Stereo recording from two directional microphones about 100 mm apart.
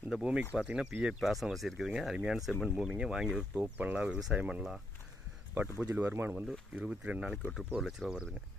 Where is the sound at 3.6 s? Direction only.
15° right (ahead or behind).